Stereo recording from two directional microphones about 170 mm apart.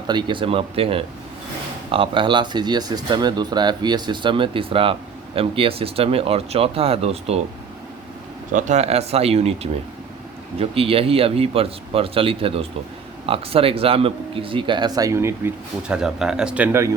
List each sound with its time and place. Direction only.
0.1 s speech: 25° right (ahead or behind)
8.5 s speech: 45° right (ahead or behind)
10.6 s speech: 35° right (ahead or behind); by 16.6 s 5° right (ahead or behind)